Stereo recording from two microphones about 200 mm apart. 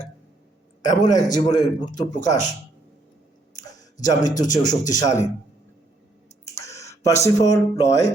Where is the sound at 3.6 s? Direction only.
20° left (ahead or behind).